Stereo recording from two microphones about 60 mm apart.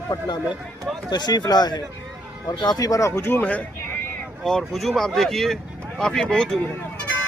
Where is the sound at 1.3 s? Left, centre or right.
Left.